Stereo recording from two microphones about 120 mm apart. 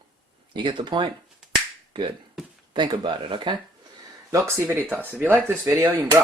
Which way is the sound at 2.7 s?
40° right (ahead or behind).